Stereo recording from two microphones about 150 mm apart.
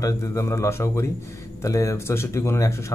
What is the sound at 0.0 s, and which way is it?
Speech, 20° left (ahead or behind).